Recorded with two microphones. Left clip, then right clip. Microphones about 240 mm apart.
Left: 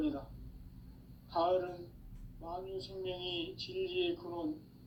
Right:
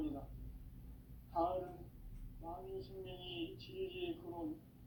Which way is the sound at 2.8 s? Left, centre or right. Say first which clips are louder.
Left 9 dB; left.